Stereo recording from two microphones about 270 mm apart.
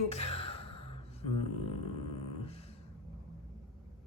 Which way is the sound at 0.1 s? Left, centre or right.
Left.